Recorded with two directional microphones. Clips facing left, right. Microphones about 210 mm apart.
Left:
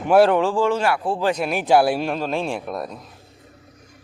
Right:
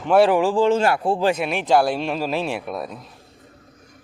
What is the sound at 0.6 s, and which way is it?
Speech, 25° right (ahead or behind).